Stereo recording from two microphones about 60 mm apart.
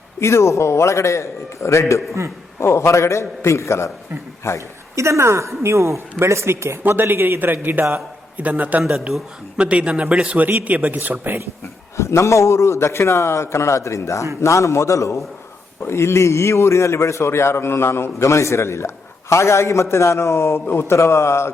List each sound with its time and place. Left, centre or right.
0.2 s a man's voice: left
4.9 s a woman's voice: right
11.9 s a man's voice: left
15.8 s a man's voice: left
18.3 s a man's voice: left
20.7 s a man's voice: left
20.9 s a man's voice: left